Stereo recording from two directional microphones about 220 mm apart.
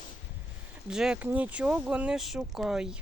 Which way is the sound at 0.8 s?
5° right (ahead or behind).